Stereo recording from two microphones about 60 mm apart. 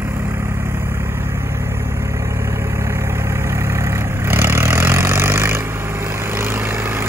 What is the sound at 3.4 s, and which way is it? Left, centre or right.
Vehicle, right.